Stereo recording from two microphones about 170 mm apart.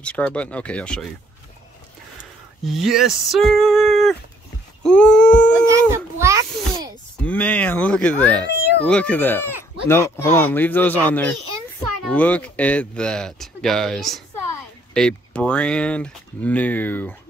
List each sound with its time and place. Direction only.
0.0 s speech: 5° left (ahead or behind)
2.8 s speech: centre (ahead or behind)
4.8 s wail: 5° left (ahead or behind)
5.7 s a sound: 15° right (ahead or behind)
7.2 s speech: 10° left (ahead or behind)